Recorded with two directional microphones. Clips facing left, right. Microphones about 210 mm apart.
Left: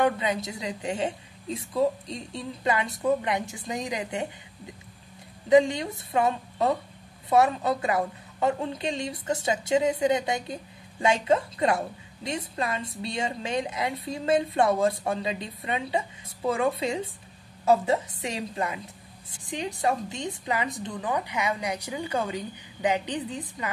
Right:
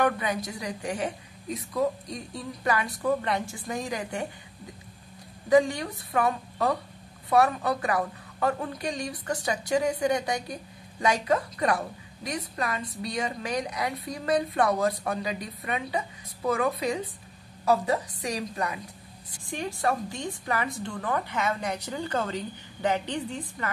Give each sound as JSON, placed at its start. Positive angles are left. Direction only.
{"t": 0.0, "sound": "a woman's voice", "side_deg": 25}
{"t": 5.5, "sound": "a woman's voice", "side_deg": 20}